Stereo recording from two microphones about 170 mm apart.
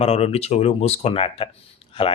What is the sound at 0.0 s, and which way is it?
Speech, 35° left (ahead or behind).